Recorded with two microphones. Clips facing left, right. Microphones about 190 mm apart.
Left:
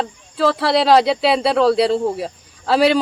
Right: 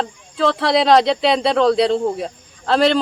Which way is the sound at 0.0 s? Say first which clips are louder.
Left 1 dB; 5° left (ahead or behind).